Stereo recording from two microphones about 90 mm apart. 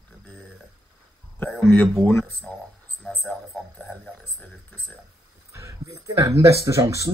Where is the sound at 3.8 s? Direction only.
10° left (ahead or behind).